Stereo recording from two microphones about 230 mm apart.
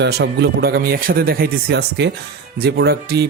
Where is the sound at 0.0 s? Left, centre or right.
Right.